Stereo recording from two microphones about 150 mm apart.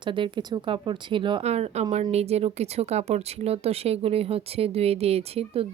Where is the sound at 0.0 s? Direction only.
35° right (ahead or behind).